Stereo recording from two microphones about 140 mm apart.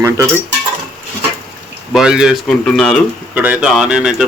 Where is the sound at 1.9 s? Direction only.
5° right (ahead or behind).